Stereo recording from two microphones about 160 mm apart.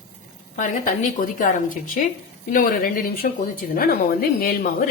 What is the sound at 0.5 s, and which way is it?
A woman's voice, 55° left (ahead or behind).